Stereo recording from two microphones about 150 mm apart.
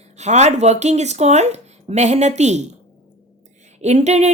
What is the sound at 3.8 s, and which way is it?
Speech, 50° right (ahead or behind).